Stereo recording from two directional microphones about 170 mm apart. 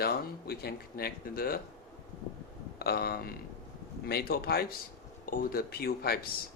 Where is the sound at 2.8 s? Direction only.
70° left (ahead or behind).